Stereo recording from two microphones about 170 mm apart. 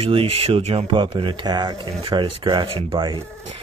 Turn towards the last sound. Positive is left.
turn(degrees=-30)  # may be behind; listen again after turning